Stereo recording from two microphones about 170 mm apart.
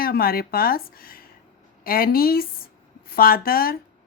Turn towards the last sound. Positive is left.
turn(degrees=60)  # may be behind; listen again after turning